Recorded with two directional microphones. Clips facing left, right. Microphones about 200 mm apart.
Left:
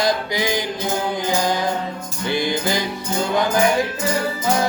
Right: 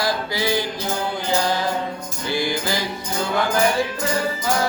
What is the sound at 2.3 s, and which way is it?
Music, 20° left (ahead or behind).